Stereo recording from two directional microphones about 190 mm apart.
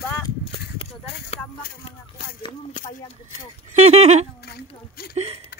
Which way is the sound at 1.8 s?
30° left (ahead or behind).